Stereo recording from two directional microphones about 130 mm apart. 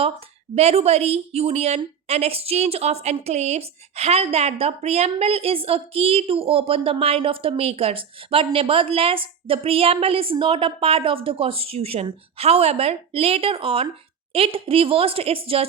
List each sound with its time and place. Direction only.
0.5 s a woman's voice: 50° right (ahead or behind)